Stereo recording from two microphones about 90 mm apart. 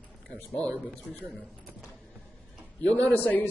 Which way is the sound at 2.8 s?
15° left (ahead or behind).